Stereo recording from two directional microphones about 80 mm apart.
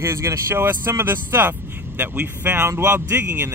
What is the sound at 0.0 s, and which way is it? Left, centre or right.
Speech, right.